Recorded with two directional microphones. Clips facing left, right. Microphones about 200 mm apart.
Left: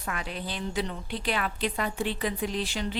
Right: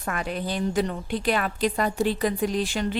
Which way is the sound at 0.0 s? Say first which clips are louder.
Right 6 dB; 50° right (ahead or behind).